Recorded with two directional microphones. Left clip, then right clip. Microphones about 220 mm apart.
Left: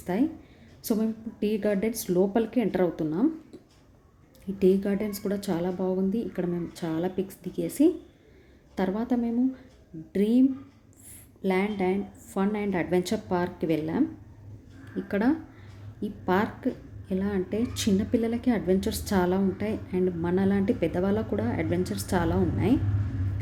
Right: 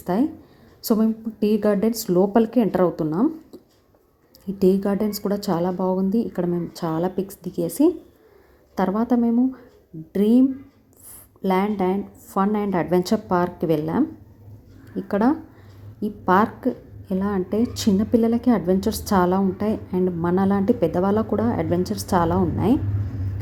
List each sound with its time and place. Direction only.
0.0 s a woman's voice: 20° right (ahead or behind)
4.6 s a woman's voice: 20° right (ahead or behind)
8.7 s a woman's voice: 15° right (ahead or behind)
11.4 s a woman's voice: 15° right (ahead or behind)